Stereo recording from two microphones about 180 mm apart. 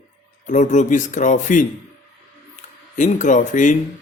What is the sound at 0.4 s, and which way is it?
Speech, 45° left (ahead or behind).